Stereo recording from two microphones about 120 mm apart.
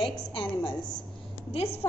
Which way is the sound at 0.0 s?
45° left (ahead or behind).